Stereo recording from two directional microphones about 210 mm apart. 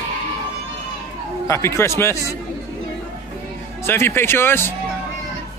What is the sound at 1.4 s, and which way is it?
Speech, 10° left (ahead or behind).